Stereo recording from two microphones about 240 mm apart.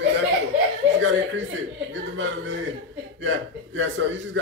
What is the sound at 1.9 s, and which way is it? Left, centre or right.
Speech, right.